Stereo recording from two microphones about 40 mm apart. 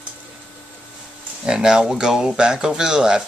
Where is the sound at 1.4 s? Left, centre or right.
Centre.